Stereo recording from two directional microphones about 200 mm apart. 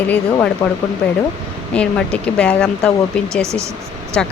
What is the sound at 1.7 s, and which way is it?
Speech, 5° left (ahead or behind).